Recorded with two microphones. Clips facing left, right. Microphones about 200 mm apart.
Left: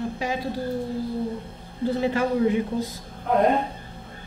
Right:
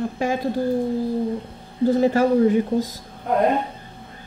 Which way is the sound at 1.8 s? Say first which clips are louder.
Right 6 dB; 40° right (ahead or behind).